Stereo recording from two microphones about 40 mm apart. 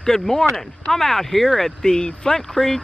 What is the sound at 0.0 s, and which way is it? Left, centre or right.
Speech, centre.